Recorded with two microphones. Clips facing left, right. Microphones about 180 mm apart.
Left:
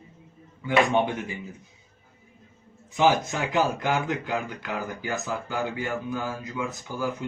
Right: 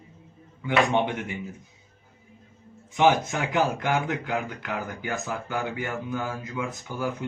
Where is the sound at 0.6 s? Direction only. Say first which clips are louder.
Left 1 dB; 20° right (ahead or behind).